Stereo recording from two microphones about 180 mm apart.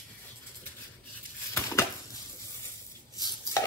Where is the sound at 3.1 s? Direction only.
20° left (ahead or behind).